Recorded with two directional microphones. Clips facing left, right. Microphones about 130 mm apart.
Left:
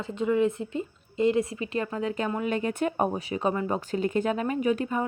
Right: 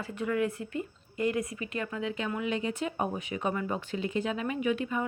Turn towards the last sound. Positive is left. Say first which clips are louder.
# left 4 dB
turn(degrees=40)  # may be behind; listen again after turning